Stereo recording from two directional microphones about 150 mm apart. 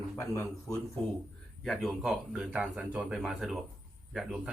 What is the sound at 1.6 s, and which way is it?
A man's voice, centre (ahead or behind).